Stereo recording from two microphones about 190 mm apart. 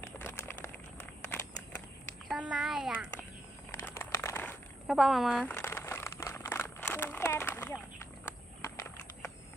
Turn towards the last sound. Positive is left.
turn(degrees=10)  # may be behind; listen again after turning